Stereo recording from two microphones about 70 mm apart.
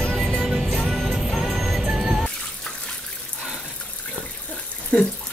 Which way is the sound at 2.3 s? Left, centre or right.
Centre.